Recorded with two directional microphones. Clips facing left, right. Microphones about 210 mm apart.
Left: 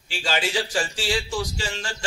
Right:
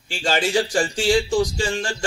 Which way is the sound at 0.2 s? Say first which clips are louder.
Right 5 dB; 45° right (ahead or behind).